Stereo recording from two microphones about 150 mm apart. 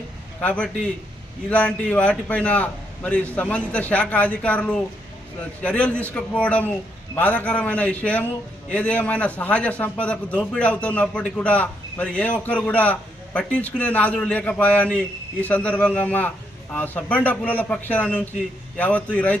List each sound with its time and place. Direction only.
0.4 s a man's voice: 10° left (ahead or behind)